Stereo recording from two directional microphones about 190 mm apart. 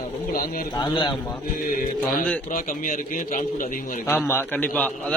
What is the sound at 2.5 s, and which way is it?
A man's voice, 45° left (ahead or behind).